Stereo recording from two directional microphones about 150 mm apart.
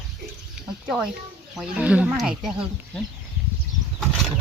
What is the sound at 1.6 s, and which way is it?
Speech, 5° right (ahead or behind).